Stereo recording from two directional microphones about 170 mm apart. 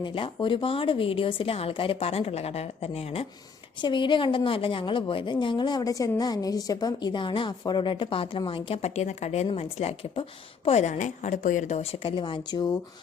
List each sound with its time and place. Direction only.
0.0 s a woman's voice: 30° left (ahead or behind)